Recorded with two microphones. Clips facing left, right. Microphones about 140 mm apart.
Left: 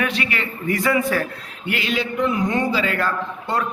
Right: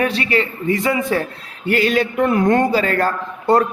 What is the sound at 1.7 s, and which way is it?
A man's voice, 45° right (ahead or behind).